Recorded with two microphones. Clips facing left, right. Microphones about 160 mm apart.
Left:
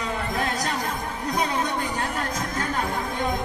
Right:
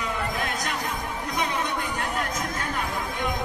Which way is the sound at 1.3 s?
35° left (ahead or behind).